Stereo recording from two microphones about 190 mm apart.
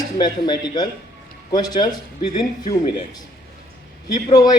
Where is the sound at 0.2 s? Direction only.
20° left (ahead or behind).